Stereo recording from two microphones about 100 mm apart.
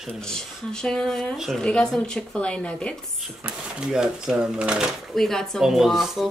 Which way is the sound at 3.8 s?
5° right (ahead or behind).